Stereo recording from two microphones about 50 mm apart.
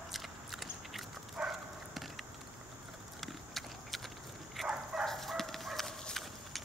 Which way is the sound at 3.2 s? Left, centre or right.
Centre.